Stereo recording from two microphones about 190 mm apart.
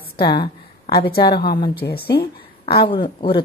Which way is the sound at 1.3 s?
55° left (ahead or behind).